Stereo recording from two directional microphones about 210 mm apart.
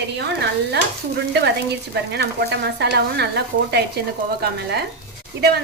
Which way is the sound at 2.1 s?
50° right (ahead or behind).